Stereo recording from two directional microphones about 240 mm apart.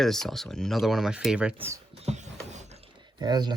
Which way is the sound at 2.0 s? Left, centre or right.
Right.